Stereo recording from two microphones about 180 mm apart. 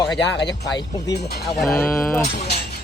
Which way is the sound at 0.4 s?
25° left (ahead or behind).